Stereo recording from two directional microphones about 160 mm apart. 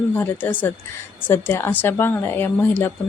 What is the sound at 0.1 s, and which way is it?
Speech, 10° left (ahead or behind).